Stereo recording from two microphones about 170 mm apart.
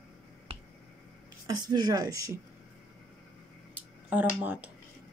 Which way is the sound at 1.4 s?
25° right (ahead or behind).